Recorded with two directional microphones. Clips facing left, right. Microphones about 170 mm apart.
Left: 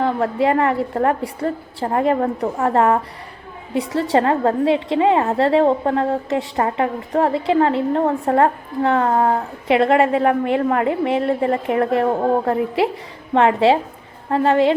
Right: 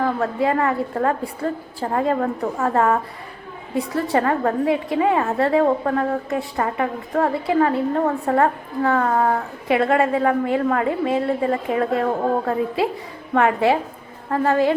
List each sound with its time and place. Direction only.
0.0 s a woman's voice: 25° left (ahead or behind)
4.1 s a woman's voice: 25° left (ahead or behind)